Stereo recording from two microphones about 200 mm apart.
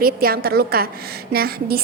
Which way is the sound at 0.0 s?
50° right (ahead or behind).